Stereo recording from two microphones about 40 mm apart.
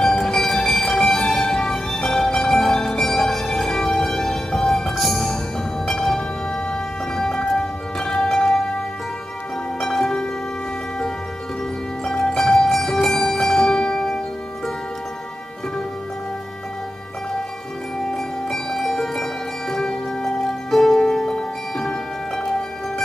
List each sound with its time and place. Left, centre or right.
0.0 s music: centre
4.9 s music: centre
5.9 s music: centre
9.8 s music: centre
12.0 s music: centre
18.1 s music: centre